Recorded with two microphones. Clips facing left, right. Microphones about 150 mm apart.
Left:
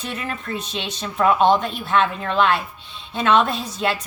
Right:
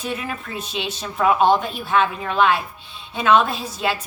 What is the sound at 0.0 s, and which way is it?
A woman's voice, 5° right (ahead or behind).